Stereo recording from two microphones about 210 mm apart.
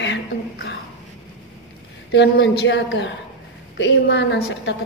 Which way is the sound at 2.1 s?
55° left (ahead or behind).